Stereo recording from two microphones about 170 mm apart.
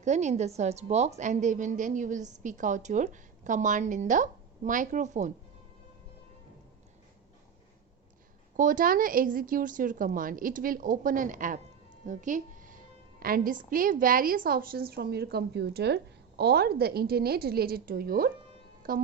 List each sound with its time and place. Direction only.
0.0 s a woman's voice: 45° right (ahead or behind)
8.5 s a woman's voice: 50° right (ahead or behind)